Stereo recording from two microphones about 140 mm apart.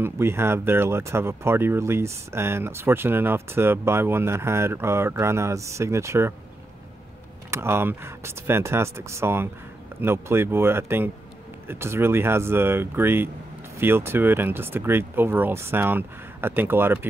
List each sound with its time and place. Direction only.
0.0 s speech: 15° right (ahead or behind)
7.5 s speech: 15° right (ahead or behind)